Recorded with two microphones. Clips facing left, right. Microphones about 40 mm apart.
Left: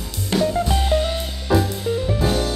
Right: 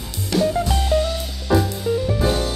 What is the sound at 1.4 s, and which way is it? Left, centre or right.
Music, centre.